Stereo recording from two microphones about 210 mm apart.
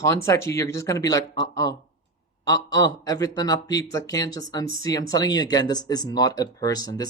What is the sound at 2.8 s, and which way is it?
Speech, 20° left (ahead or behind).